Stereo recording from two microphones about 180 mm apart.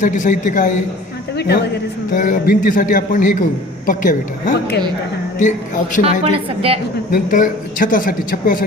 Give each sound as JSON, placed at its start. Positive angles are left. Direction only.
{"t": 0.0, "sound": "a man's voice", "side_deg": 45}
{"t": 1.4, "sound": "a man's voice", "side_deg": 65}
{"t": 2.1, "sound": "a man's voice", "side_deg": 50}
{"t": 6.2, "sound": "a woman's voice", "side_deg": -30}
{"t": 7.1, "sound": "a man's voice", "side_deg": 50}